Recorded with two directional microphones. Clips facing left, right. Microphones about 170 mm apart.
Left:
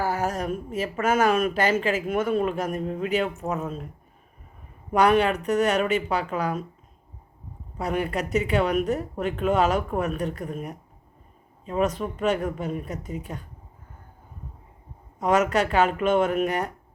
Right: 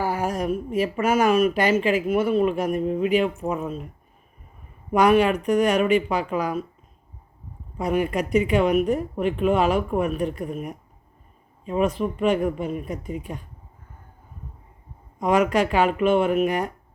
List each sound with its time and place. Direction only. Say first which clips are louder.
0.0 s a woman's voice: right 2 dB; 10° right (ahead or behind)
4.9 s a woman's voice: right 2 dB; 10° right (ahead or behind)
7.8 s a woman's voice: right 4 dB; 10° right (ahead or behind)
15.2 s a woman's voice: right 2 dB; 10° right (ahead or behind)